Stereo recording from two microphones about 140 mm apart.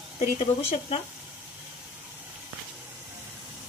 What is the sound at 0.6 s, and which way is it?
Speech, 45° left (ahead or behind).